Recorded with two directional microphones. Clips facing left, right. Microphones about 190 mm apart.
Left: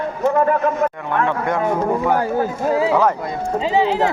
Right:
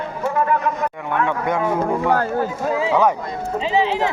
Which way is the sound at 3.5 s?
40° left (ahead or behind).